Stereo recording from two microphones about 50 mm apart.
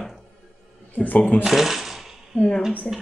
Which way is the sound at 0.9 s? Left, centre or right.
Left.